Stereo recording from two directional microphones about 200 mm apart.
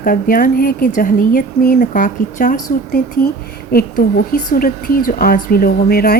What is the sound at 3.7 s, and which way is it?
A woman's voice, 45° left (ahead or behind).